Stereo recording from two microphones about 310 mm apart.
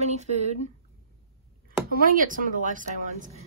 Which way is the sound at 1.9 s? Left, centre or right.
Right.